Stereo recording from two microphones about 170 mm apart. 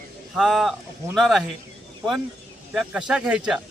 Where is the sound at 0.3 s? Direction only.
Centre (ahead or behind).